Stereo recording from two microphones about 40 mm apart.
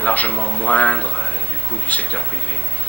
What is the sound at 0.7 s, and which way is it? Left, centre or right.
Speech, left.